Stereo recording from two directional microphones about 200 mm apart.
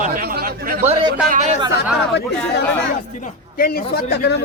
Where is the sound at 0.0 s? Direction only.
45° right (ahead or behind).